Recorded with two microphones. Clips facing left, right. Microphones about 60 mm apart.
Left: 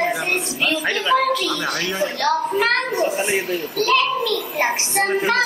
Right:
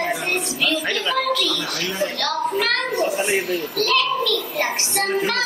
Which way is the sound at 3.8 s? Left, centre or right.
Left.